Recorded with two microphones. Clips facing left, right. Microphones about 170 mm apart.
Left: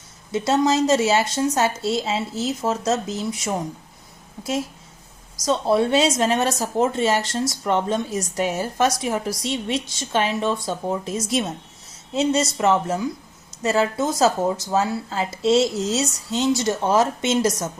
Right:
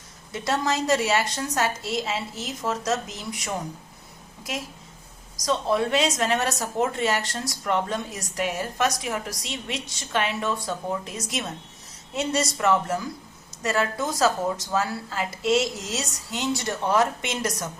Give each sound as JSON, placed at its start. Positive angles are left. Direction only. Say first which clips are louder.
{"t": 0.3, "sound": "speech", "louder": "left 6 dB", "side_deg": 25}
{"t": 5.5, "sound": "speech", "louder": "left 4 dB", "side_deg": 30}